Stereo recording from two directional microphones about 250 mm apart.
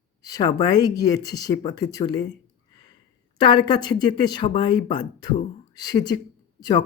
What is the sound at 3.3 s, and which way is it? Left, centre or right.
Speech, centre.